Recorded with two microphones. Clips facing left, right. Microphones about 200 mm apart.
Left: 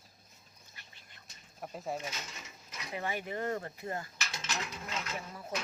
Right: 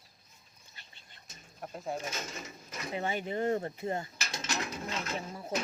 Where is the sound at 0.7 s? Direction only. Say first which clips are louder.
Right 1 dB; 30° right (ahead or behind).